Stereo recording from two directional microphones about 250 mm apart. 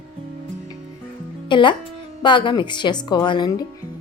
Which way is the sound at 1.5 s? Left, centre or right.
Centre.